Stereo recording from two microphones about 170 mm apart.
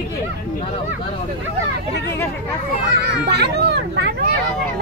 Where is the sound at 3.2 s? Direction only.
75° right (ahead or behind).